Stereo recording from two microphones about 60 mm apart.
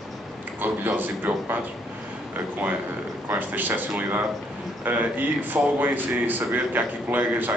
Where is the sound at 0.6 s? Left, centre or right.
Right.